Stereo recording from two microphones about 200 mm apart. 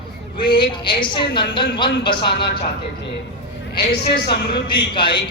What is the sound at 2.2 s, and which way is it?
Speech, 55° left (ahead or behind).